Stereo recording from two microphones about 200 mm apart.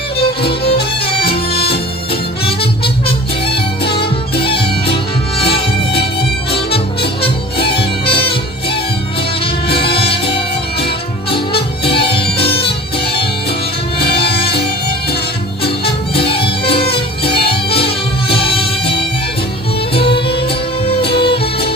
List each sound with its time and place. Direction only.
0.4 s music: 50° left (ahead or behind)
2.4 s music: 25° left (ahead or behind)
3.9 s music: 25° left (ahead or behind)
8.0 s music: 25° left (ahead or behind)
9.7 s music: 25° left (ahead or behind)
10.2 s music: 55° left (ahead or behind)
11.9 s music: 25° left (ahead or behind)
14.0 s music: 55° left (ahead or behind)
16.3 s music: 25° left (ahead or behind)
17.2 s music: 50° left (ahead or behind)
17.5 s music: 25° left (ahead or behind)
21.2 s music: 25° left (ahead or behind)